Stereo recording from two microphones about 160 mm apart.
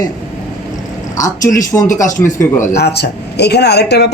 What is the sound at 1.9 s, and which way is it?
Speech, 50° left (ahead or behind).